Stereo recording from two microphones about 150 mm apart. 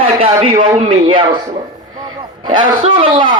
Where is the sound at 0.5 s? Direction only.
55° right (ahead or behind).